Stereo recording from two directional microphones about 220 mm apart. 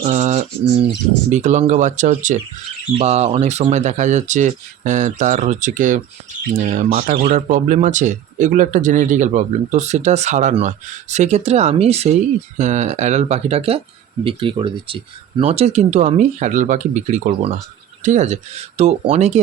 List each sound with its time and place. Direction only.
0.0 s bird: 30° right (ahead or behind)
1.3 s speech: 30° right (ahead or behind)